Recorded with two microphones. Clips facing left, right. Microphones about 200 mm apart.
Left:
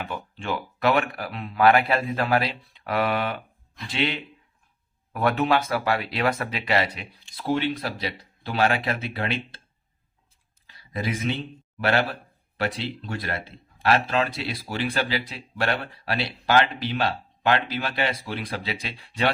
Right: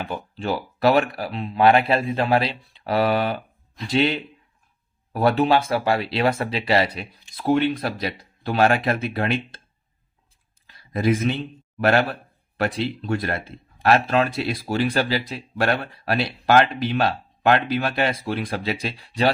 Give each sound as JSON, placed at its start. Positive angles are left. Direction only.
{"t": 0.0, "sound": "speech", "side_deg": -35}
{"t": 7.4, "sound": "speech", "side_deg": -55}
{"t": 10.7, "sound": "a sound", "side_deg": -50}
{"t": 11.8, "sound": "speech", "side_deg": -50}